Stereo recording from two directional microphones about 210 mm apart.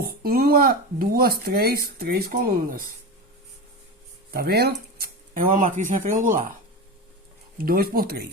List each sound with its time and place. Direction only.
0.0 s speech: 45° right (ahead or behind)
4.3 s speech: 50° right (ahead or behind)
7.6 s speech: 45° right (ahead or behind)